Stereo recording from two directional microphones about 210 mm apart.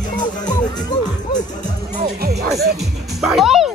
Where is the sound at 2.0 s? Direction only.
50° right (ahead or behind).